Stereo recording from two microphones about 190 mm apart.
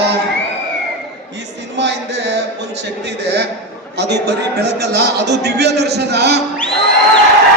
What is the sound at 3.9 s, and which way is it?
A man's voice, 60° right (ahead or behind).